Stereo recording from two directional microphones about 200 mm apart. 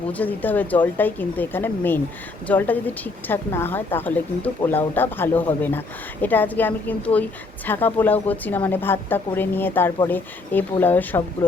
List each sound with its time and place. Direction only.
0.1 s speech: 10° left (ahead or behind)